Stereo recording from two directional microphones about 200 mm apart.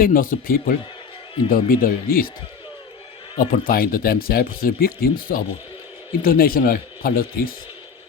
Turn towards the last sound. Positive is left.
turn(degrees=45)  # may be behind; listen again after turning